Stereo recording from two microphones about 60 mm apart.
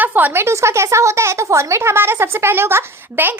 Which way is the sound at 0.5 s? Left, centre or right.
Right.